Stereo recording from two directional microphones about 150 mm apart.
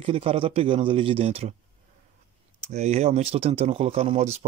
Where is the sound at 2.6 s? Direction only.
45° right (ahead or behind).